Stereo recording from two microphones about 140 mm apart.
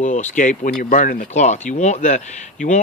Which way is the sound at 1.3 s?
55° left (ahead or behind).